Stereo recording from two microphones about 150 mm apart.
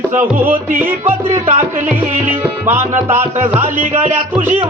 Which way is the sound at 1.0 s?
50° right (ahead or behind).